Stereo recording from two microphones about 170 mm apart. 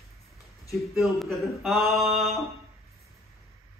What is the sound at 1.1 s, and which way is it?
A man's voice, centre (ahead or behind).